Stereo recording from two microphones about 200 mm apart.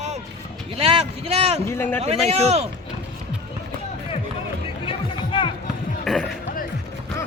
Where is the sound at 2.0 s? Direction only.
30° right (ahead or behind).